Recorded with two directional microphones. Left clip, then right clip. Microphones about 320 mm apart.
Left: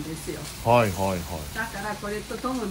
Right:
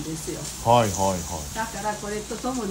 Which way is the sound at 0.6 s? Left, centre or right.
Centre.